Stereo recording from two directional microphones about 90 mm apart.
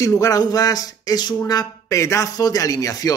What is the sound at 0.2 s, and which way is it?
Speech, 45° left (ahead or behind).